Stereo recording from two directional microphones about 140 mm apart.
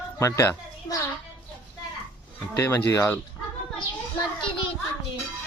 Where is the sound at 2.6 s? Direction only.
15° left (ahead or behind).